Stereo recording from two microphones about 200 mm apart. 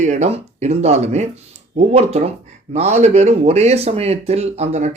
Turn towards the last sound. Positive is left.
turn(degrees=-35)  # may be behind; listen again after turning